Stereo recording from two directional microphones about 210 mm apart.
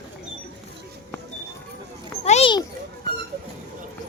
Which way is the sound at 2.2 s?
30° left (ahead or behind).